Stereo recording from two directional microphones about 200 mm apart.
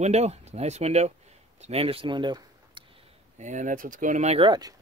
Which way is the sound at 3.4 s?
40° right (ahead or behind).